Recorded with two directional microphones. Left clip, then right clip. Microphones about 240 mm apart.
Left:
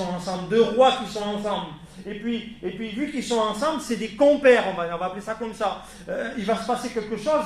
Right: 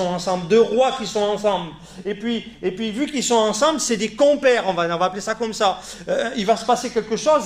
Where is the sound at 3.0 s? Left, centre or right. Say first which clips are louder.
Right 6 dB; right.